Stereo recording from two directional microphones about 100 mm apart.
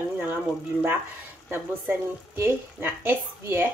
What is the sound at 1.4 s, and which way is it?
Speech, 20° right (ahead or behind).